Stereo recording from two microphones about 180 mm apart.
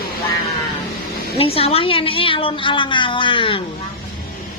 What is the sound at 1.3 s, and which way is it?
A woman's voice, 30° left (ahead or behind).